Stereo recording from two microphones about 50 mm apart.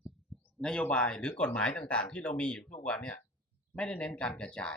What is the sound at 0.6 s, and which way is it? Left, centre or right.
Speech, centre.